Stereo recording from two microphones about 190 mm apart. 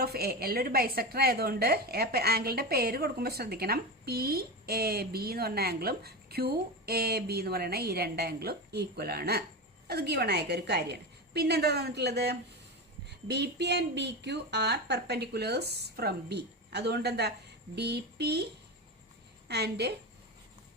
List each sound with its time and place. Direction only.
0.0 s a woman's voice: 55° right (ahead or behind)
19.5 s a woman's voice: 60° right (ahead or behind)